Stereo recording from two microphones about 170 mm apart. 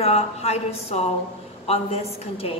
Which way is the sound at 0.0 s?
40° left (ahead or behind).